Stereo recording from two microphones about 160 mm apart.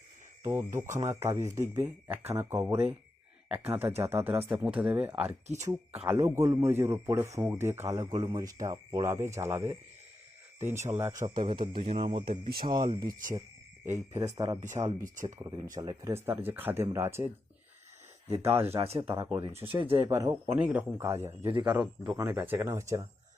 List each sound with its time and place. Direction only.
0.4 s speech: 15° right (ahead or behind)
6.2 s speech: 20° right (ahead or behind)
11.3 s music: 30° right (ahead or behind)
12.3 s speech: 70° right (ahead or behind)
12.6 s speech: 25° right (ahead or behind)
13.1 s speech: 55° right (ahead or behind)
14.2 s speech: 20° right (ahead or behind)
15.1 s speech: 55° right (ahead or behind)
15.4 s speech: 20° right (ahead or behind)
18.8 s music: 35° right (ahead or behind)
19.2 s speech: 15° right (ahead or behind)